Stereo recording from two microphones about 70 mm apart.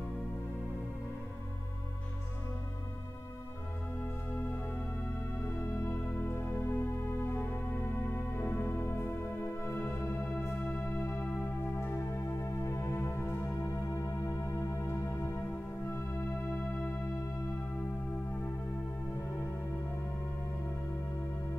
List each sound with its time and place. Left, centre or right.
4.0 s music: left
5.9 s music: left
8.4 s music: left
11.8 s music: left
13.7 s music: left
14.9 s music: left
16.5 s music: left